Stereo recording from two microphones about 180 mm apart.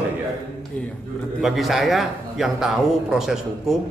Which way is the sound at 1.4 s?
Centre (ahead or behind).